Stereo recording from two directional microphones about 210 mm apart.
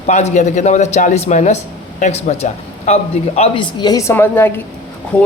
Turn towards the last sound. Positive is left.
turn(degrees=5)  # may be behind; listen again after turning